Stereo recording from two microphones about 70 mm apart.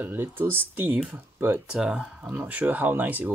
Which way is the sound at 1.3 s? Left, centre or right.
Right.